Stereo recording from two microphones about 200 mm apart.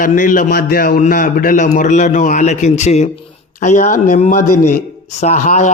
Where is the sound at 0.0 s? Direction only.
40° left (ahead or behind).